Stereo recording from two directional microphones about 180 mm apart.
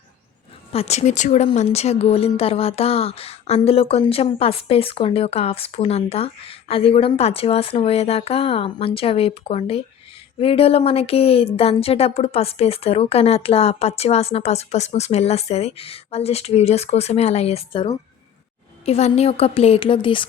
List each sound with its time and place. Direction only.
0.7 s a woman's voice: 35° left (ahead or behind)